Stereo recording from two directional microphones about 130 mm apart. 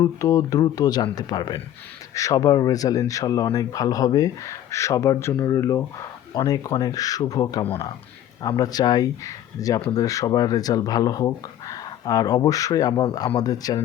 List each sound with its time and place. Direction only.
0.0 s speech: 25° left (ahead or behind)